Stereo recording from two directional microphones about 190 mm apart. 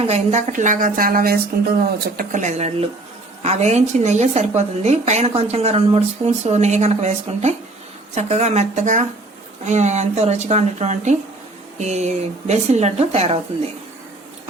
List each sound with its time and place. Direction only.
0.1 s a woman's voice: 35° right (ahead or behind)
2.1 s a woman's voice: 40° right (ahead or behind)